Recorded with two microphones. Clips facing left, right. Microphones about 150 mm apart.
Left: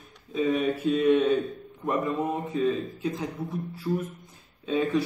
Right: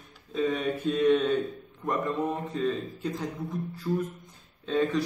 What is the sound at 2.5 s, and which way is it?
Speech, 5° left (ahead or behind).